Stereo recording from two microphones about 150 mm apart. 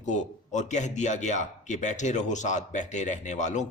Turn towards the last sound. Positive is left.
turn(degrees=55)  # may be behind; listen again after turning